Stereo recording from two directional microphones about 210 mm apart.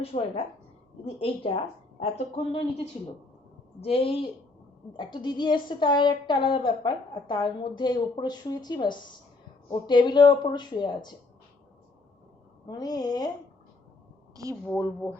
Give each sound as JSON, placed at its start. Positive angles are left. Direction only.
{"t": 0.0, "sound": "a woman's voice", "side_deg": 25}
{"t": 12.6, "sound": "a woman's voice", "side_deg": 20}
{"t": 14.4, "sound": "speech", "side_deg": -15}